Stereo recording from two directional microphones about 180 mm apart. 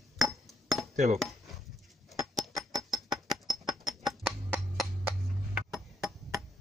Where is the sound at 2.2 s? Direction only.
Centre (ahead or behind).